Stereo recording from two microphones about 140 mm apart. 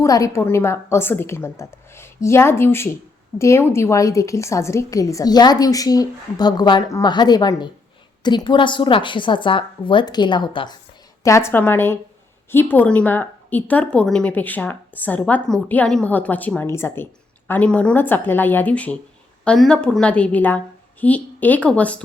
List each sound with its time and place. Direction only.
0.0 s a woman's voice: 25° left (ahead or behind)
11.2 s a woman's voice: 20° left (ahead or behind)